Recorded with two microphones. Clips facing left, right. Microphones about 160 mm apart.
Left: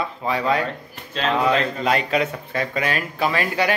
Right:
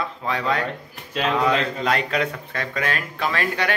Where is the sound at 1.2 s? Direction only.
10° right (ahead or behind).